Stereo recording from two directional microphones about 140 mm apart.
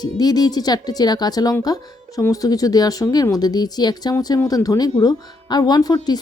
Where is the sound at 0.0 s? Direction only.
30° left (ahead or behind).